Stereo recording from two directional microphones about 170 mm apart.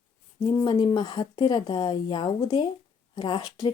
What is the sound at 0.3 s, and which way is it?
Speech, 25° left (ahead or behind).